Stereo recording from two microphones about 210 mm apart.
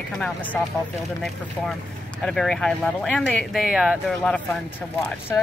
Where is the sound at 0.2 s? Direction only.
5° left (ahead or behind).